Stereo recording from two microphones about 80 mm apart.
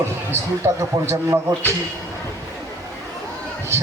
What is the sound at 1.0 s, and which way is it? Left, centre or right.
Speech, right.